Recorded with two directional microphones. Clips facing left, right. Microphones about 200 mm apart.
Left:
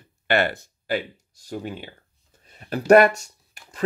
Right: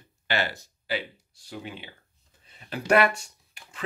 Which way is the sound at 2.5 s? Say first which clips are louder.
Left 8 dB; 45° left (ahead or behind).